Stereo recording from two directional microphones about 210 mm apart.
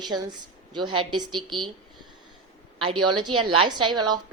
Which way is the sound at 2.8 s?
25° right (ahead or behind).